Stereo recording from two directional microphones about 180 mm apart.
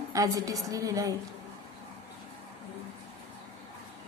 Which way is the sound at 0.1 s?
20° right (ahead or behind).